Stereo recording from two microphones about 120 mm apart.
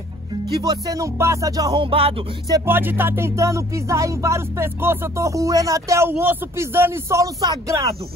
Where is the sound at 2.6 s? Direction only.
15° right (ahead or behind).